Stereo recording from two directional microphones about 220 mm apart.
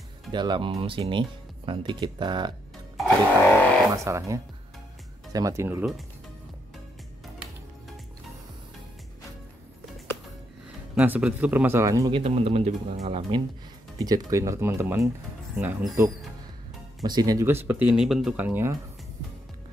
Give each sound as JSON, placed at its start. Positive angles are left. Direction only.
{"t": 0.3, "sound": "speech", "side_deg": -20}
{"t": 3.0, "sound": "a sound", "side_deg": 5}
{"t": 4.0, "sound": "speech", "side_deg": -15}
{"t": 11.0, "sound": "speech", "side_deg": -5}
{"t": 12.1, "sound": "speech", "side_deg": -30}
{"t": 13.9, "sound": "speech", "side_deg": -15}
{"t": 15.5, "sound": "speech", "side_deg": 0}
{"t": 17.0, "sound": "speech", "side_deg": -20}